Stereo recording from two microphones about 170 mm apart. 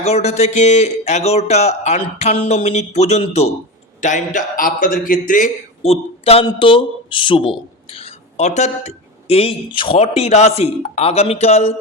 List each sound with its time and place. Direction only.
0.0 s a man's voice: 40° left (ahead or behind)
5.8 s a man's voice: 35° left (ahead or behind)